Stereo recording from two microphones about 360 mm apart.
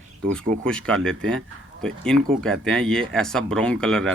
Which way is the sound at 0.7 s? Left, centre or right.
Centre.